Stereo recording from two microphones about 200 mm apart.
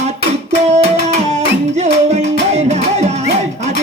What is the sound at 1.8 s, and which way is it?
Music, 35° right (ahead or behind).